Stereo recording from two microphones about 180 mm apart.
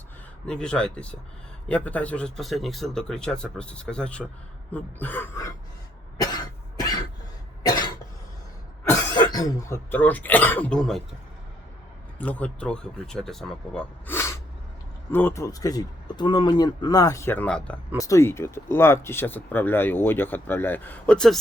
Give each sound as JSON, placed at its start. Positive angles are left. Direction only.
{"t": 0.4, "sound": "speech", "side_deg": 5}
{"t": 6.1, "sound": "cough", "side_deg": 20}
{"t": 8.8, "sound": "speech", "side_deg": 20}
{"t": 12.2, "sound": "speech", "side_deg": 10}
{"t": 17.9, "sound": "speech", "side_deg": 15}